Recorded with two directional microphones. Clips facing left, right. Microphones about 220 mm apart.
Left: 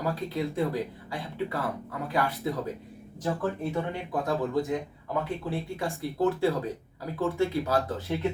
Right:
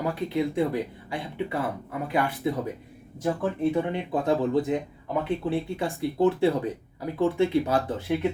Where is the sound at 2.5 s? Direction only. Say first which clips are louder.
Right 3 dB; 20° right (ahead or behind).